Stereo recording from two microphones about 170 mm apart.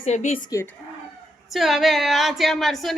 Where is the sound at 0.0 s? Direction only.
40° left (ahead or behind).